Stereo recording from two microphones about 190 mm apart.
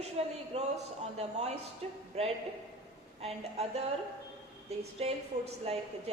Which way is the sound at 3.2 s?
35° right (ahead or behind).